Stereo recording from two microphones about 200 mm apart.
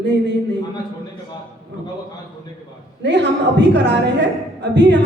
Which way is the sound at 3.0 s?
60° right (ahead or behind).